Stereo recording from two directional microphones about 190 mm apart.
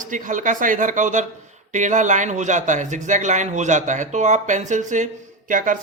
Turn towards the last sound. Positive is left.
turn(degrees=-45)  # may be behind; listen again after turning